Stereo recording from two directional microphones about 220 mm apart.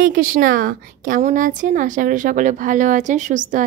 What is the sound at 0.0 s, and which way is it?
A woman's voice, 40° right (ahead or behind).